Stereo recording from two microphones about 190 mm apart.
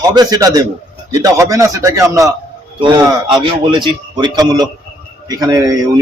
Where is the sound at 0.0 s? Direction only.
20° right (ahead or behind).